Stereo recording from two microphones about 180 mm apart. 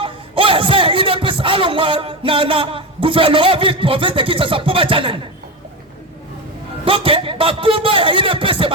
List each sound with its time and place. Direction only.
0.0 s speech: 30° right (ahead or behind)
6.8 s a man's voice: 30° right (ahead or behind)